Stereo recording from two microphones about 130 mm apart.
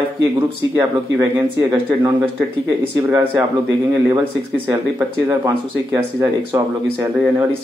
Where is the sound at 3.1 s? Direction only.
20° right (ahead or behind).